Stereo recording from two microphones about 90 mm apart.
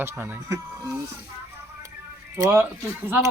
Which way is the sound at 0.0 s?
25° right (ahead or behind).